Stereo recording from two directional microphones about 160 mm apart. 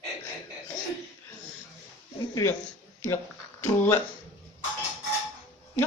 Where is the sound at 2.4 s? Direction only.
20° left (ahead or behind).